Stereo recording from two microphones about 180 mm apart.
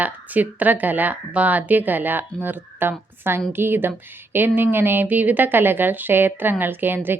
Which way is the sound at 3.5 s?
10° right (ahead or behind).